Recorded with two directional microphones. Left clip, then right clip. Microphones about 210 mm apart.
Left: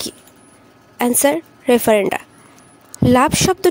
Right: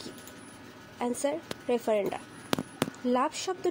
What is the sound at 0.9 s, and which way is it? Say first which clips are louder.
A woman's voice: left 15 dB; 50° left (ahead or behind).